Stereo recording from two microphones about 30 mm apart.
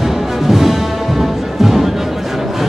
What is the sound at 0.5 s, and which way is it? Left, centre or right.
Music, centre.